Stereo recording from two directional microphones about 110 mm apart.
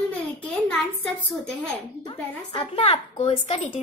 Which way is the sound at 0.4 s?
10° left (ahead or behind).